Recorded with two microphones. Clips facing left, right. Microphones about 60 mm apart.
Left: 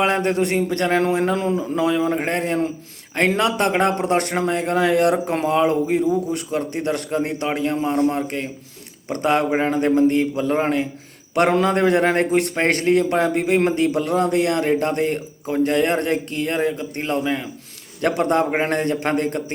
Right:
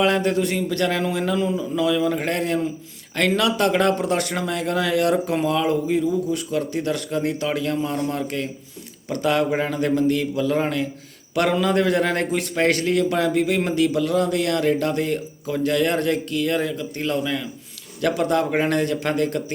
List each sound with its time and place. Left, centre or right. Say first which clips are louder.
0.0 s speech: left 1 dB; left